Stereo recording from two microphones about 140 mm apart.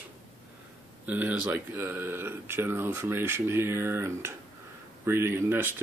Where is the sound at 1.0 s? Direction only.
10° right (ahead or behind).